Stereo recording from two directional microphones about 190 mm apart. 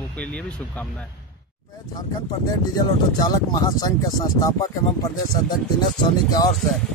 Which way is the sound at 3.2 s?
20° left (ahead or behind).